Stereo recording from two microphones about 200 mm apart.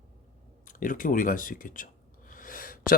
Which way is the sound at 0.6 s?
40° left (ahead or behind).